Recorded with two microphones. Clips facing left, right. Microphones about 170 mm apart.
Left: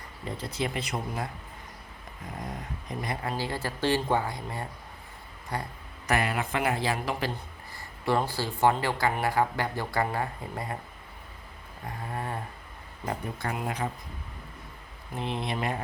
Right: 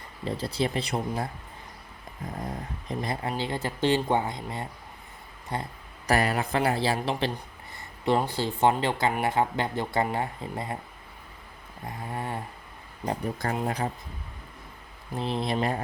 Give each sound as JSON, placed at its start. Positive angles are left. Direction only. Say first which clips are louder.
{"t": 0.3, "sound": "speech", "louder": "right 4 dB", "side_deg": -30}
{"t": 3.0, "sound": "speech", "louder": "right 1 dB", "side_deg": -25}
{"t": 6.1, "sound": "speech", "louder": "right 3 dB", "side_deg": -35}
{"t": 11.9, "sound": "speech", "louder": "right 1 dB", "side_deg": -25}
{"t": 15.1, "sound": "speech", "louder": "right 4 dB", "side_deg": -35}